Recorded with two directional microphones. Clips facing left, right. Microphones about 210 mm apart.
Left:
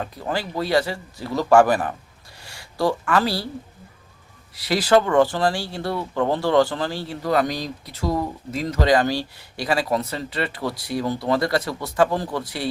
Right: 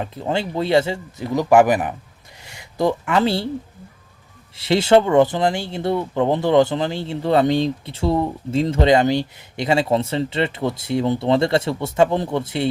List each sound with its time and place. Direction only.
0.0 s speech: 25° right (ahead or behind)
4.5 s speech: 25° right (ahead or behind)